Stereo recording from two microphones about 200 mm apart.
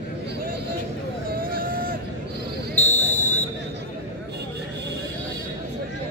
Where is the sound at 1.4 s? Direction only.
45° right (ahead or behind).